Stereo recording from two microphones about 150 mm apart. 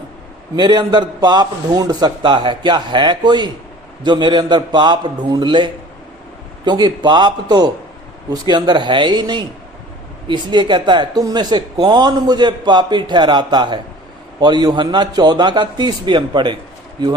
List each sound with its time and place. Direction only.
0.5 s a man's voice: 30° right (ahead or behind)